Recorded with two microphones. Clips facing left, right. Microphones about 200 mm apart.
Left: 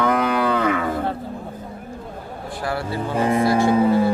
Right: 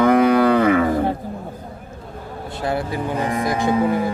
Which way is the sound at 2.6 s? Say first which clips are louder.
Right 2 dB; 20° right (ahead or behind).